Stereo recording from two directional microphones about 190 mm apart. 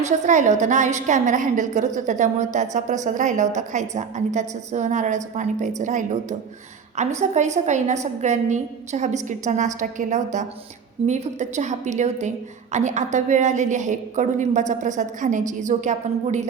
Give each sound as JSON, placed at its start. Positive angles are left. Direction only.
{"t": 0.0, "sound": "a woman's voice", "side_deg": -40}
{"t": 7.2, "sound": "a woman's voice", "side_deg": -35}